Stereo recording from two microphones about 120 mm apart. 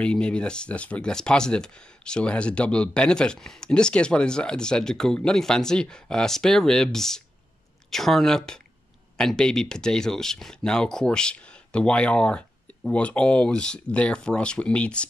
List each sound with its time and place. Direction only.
0.0 s speech: 10° left (ahead or behind)